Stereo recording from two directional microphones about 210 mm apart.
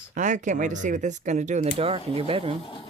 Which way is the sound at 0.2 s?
35° right (ahead or behind).